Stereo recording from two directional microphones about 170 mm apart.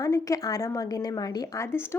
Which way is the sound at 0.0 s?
20° left (ahead or behind).